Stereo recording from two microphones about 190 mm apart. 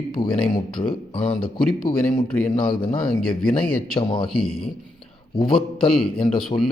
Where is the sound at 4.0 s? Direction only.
25° left (ahead or behind).